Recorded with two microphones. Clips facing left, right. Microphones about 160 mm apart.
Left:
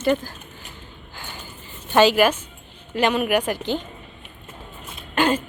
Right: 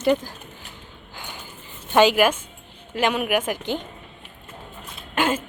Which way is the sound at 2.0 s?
10° right (ahead or behind).